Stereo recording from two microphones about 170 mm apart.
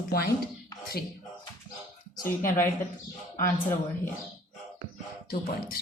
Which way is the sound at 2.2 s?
55° left (ahead or behind).